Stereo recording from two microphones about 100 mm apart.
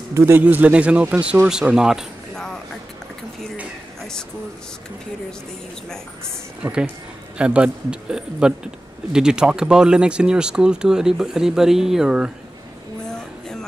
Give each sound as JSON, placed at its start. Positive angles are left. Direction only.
{"t": 0.1, "sound": "a man's voice", "side_deg": -25}
{"t": 0.4, "sound": "speech", "side_deg": -15}
{"t": 2.3, "sound": "music", "side_deg": 5}
{"t": 6.6, "sound": "speech", "side_deg": -10}